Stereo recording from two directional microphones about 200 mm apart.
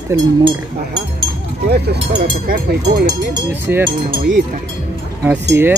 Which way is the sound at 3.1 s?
15° right (ahead or behind).